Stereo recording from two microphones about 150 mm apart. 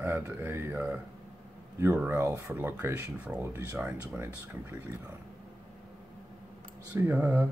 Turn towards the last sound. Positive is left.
turn(degrees=-15)  # may be behind; listen again after turning